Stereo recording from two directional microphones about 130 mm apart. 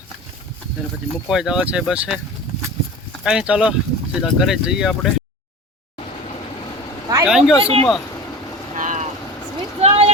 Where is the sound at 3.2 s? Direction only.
5° right (ahead or behind).